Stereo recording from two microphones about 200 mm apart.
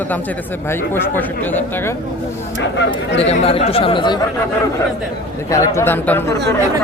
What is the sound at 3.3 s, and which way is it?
Speech, 30° left (ahead or behind).